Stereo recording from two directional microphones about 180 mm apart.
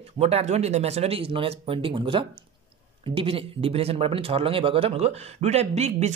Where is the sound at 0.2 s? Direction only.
35° right (ahead or behind).